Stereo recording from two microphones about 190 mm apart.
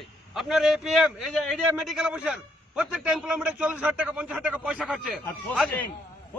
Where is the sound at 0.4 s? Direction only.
Centre (ahead or behind).